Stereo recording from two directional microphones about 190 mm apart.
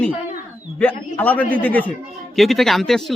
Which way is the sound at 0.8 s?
10° left (ahead or behind).